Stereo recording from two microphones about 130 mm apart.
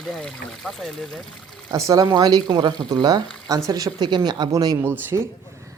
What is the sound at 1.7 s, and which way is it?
Speech, 25° right (ahead or behind).